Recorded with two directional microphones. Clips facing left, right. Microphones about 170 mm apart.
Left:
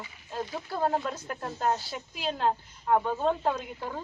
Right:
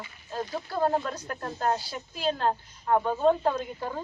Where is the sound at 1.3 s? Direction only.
15° left (ahead or behind).